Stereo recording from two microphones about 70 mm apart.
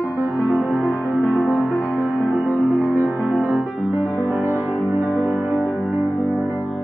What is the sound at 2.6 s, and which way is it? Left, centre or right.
Music, right.